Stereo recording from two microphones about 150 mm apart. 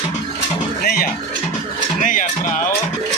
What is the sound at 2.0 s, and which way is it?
Music, 60° left (ahead or behind).